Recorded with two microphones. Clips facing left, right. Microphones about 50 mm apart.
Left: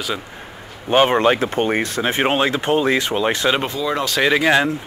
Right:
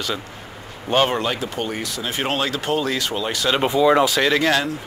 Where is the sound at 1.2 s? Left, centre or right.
Left.